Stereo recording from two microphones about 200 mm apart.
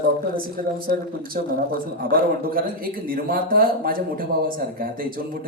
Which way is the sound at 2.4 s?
45° right (ahead or behind).